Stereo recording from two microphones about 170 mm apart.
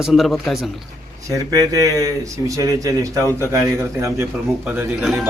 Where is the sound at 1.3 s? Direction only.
20° right (ahead or behind).